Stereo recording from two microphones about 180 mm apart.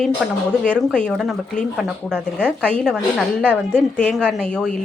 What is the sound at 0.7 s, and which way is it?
A woman's voice, 5° left (ahead or behind).